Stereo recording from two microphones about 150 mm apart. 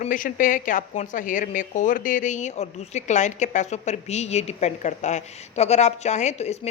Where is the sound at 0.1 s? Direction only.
65° left (ahead or behind).